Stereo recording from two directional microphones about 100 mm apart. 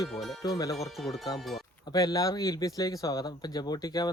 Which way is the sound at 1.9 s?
40° left (ahead or behind).